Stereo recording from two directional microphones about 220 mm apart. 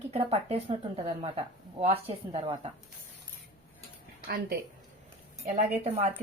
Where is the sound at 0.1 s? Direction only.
25° right (ahead or behind).